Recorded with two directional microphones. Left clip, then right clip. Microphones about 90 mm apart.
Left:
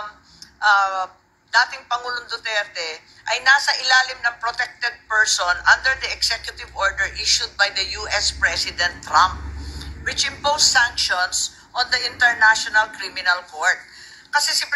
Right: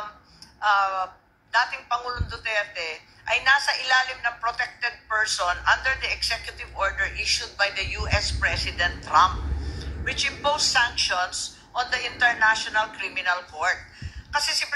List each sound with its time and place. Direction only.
0.6 s a woman's voice: 25° left (ahead or behind)